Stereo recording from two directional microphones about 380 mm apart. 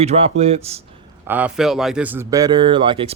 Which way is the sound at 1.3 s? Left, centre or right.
Centre.